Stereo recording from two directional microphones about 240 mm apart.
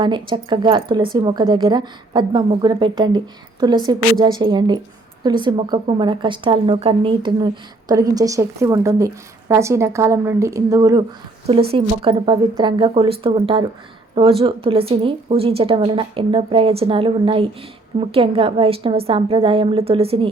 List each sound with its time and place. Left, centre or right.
0.0 s a woman's voice: centre